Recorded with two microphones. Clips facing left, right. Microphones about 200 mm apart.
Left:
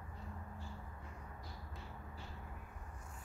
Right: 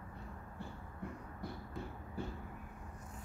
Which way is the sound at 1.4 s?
55° right (ahead or behind).